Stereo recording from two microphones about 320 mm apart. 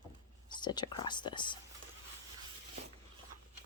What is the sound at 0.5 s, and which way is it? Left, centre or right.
Speech, centre.